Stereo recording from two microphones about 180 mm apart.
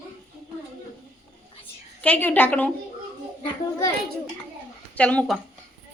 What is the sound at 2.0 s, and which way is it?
Speech, 10° left (ahead or behind).